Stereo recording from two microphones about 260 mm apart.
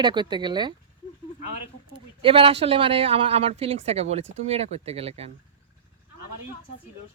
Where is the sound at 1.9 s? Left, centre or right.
Right.